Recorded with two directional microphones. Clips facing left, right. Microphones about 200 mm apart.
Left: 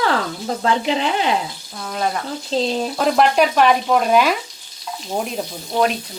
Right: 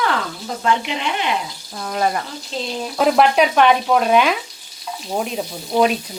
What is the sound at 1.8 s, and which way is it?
Sizzle, 5° right (ahead or behind).